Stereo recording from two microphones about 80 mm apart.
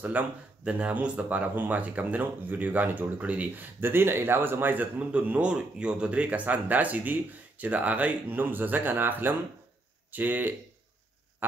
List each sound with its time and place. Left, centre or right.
0.2 s speech: right